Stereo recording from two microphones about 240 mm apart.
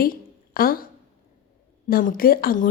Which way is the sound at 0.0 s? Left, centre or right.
Left.